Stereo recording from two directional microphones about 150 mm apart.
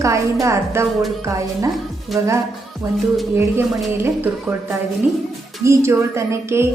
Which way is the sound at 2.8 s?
20° right (ahead or behind).